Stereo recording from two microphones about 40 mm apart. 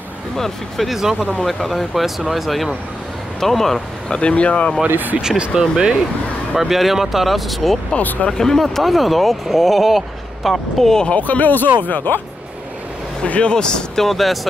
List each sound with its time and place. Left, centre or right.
0.4 s speech: centre
4.1 s speech: left
4.8 s speech: right
5.5 s speech: centre
8.3 s speech: centre
8.7 s speech: centre
11.1 s speech: left
13.2 s speech: left
14.0 s speech: centre